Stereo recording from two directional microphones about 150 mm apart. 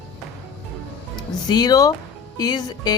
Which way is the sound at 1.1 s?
25° left (ahead or behind).